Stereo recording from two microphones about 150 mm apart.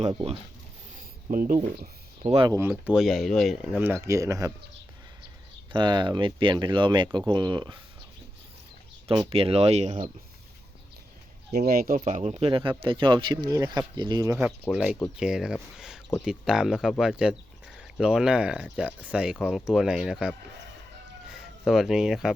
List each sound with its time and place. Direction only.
0.1 s speech: 35° right (ahead or behind)
1.3 s speech: 65° right (ahead or behind)
2.2 s speech: 40° right (ahead or behind)
2.5 s speech: 15° right (ahead or behind)
4.0 s speech: 20° right (ahead or behind)
5.7 s speech: 30° right (ahead or behind)
9.0 s speech: 40° right (ahead or behind)
11.5 s speech: 85° right
12.0 s speech: 50° right (ahead or behind)
12.5 s speech: 35° right (ahead or behind)
14.7 s speech: 5° right (ahead or behind)